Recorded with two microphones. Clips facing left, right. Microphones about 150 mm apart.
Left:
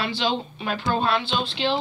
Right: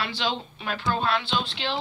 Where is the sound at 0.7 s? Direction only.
20° left (ahead or behind).